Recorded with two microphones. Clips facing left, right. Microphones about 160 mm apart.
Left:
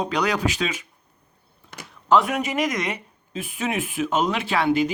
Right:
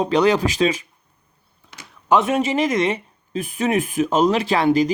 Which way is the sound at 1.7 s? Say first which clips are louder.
Left 3 dB; 50° left (ahead or behind).